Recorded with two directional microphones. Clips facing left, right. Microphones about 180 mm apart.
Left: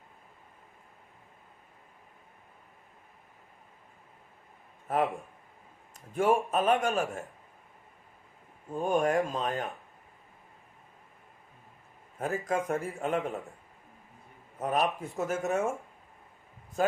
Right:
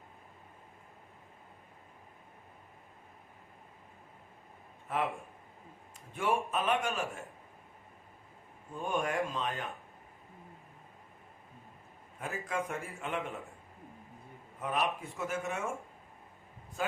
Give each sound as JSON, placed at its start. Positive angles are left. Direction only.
{"t": 4.9, "sound": "speech", "side_deg": 40}
{"t": 6.1, "sound": "speech", "side_deg": 40}
{"t": 8.7, "sound": "speech", "side_deg": 40}
{"t": 12.2, "sound": "speech", "side_deg": 40}
{"t": 14.6, "sound": "a man's voice", "side_deg": 40}